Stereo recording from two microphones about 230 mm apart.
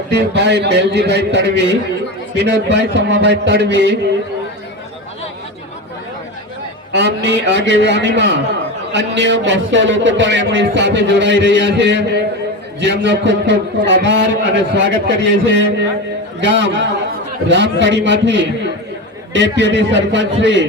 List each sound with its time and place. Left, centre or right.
0.1 s a man's voice: right
6.9 s a man's voice: right